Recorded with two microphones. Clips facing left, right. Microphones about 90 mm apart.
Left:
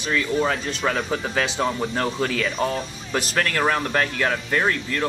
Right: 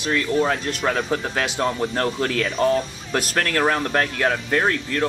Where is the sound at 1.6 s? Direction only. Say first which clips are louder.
Right 1 dB; 5° left (ahead or behind).